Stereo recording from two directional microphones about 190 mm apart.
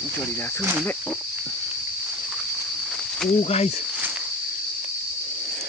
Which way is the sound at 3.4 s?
35° left (ahead or behind).